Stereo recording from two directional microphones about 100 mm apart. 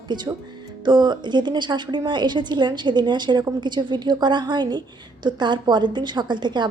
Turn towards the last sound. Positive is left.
turn(degrees=-50)  # may be behind; listen again after turning